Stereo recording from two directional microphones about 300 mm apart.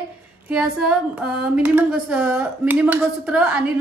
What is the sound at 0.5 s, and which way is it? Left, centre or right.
A woman's voice, centre.